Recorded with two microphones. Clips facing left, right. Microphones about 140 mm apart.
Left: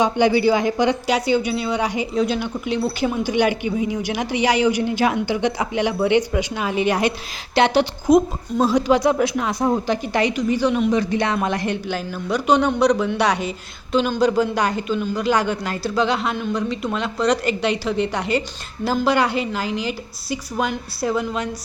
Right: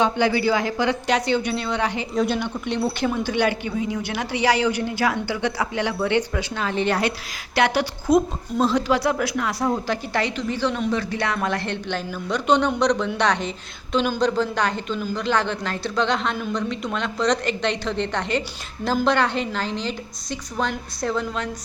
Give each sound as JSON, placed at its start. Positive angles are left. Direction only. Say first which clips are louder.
{"t": 0.0, "sound": "speech", "louder": "left 3 dB", "side_deg": 20}
{"t": 1.0, "sound": "a woman's voice", "louder": "left 2 dB", "side_deg": 10}
{"t": 2.1, "sound": "a woman's voice", "louder": "even", "side_deg": 0}
{"t": 7.5, "sound": "a woman's voice", "louder": "left 4 dB", "side_deg": 25}